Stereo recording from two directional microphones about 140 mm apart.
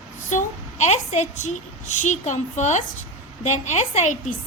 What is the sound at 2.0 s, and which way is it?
A woman's voice, 60° left (ahead or behind).